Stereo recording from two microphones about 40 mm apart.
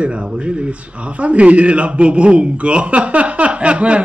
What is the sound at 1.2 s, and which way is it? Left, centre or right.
A man's voice, right.